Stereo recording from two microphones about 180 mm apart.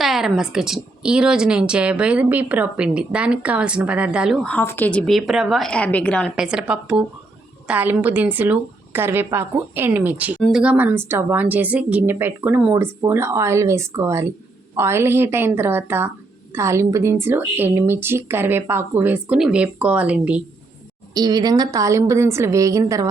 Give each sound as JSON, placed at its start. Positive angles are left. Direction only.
{"t": 0.0, "sound": "a woman's voice", "side_deg": 0}
{"t": 4.4, "sound": "a woman's voice", "side_deg": 10}
{"t": 6.3, "sound": "a woman's voice", "side_deg": -5}
{"t": 21.1, "sound": "a woman's voice", "side_deg": -20}